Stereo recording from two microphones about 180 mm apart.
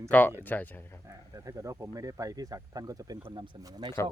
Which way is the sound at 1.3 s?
15° right (ahead or behind).